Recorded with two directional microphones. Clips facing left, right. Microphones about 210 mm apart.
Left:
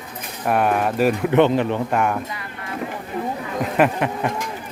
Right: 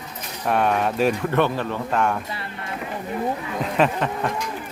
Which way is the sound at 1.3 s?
20° left (ahead or behind).